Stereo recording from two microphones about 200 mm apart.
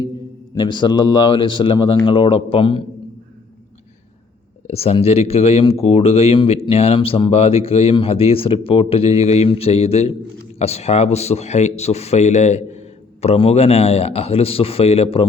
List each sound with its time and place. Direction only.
0.5 s speech: 20° left (ahead or behind)
4.6 s a man's voice: 30° left (ahead or behind)